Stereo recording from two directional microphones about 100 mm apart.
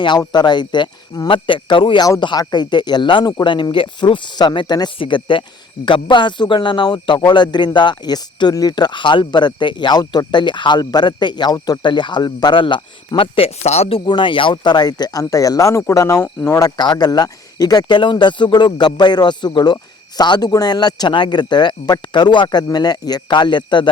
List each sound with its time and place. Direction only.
0.2 s a man's voice: 45° left (ahead or behind)
1.3 s a man's voice: 55° left (ahead or behind)
13.1 s speech: 75° left (ahead or behind)
14.0 s speech: 50° left (ahead or behind); by 16.6 s 20° left (ahead or behind)
16.6 s a man's voice: 40° left (ahead or behind)